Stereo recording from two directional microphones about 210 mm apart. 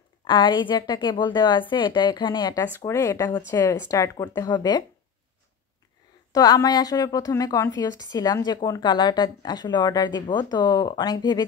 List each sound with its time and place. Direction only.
0.3 s a woman's voice: 20° left (ahead or behind)
6.3 s a woman's voice: 15° left (ahead or behind)